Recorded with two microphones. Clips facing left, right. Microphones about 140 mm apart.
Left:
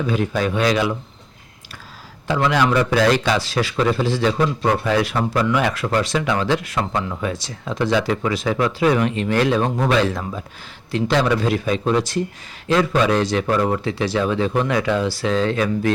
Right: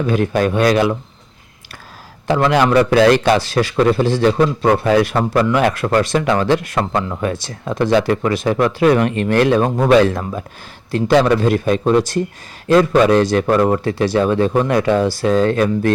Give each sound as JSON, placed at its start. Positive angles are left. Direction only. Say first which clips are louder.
{"t": 0.1, "sound": "speech", "louder": "right 6 dB", "side_deg": -55}
{"t": 2.2, "sound": "a man's voice", "louder": "right 4 dB", "side_deg": -55}